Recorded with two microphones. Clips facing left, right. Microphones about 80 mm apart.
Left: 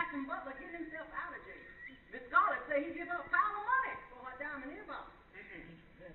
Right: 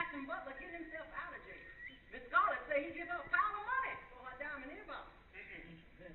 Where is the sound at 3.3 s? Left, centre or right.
Left.